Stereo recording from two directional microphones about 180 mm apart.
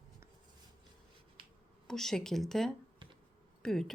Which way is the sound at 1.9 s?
Centre (ahead or behind).